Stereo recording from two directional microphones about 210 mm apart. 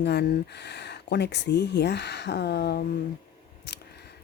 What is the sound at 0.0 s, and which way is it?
Speech, 55° left (ahead or behind).